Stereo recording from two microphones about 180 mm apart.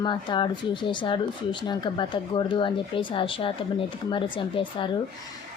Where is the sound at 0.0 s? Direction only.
25° left (ahead or behind).